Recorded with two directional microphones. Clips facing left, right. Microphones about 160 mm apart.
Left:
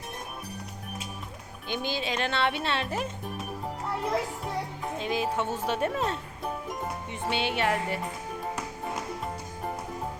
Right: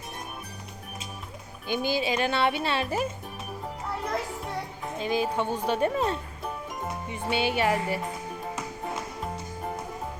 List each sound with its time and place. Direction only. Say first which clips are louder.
1.6 s speech: right 4 dB; 5° right (ahead or behind)
4.9 s speech: right 2 dB; centre (ahead or behind)